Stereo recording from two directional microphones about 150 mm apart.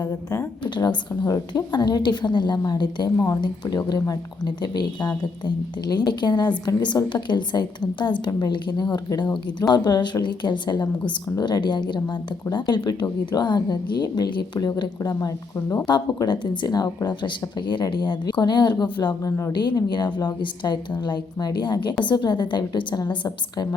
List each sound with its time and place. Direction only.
0.0 s a woman's voice: 15° left (ahead or behind)
0.6 s speech: 30° left (ahead or behind)
15.9 s speech: 30° left (ahead or behind)